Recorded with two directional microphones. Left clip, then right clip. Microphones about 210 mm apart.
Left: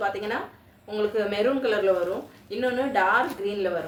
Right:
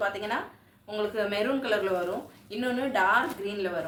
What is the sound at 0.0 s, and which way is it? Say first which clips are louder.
A woman's voice: left 2 dB; 30° right (ahead or behind).